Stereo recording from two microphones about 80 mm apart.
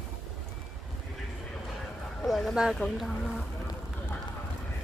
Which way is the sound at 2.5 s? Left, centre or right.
Centre.